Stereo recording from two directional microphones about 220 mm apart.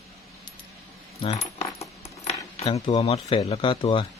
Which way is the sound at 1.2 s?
30° left (ahead or behind).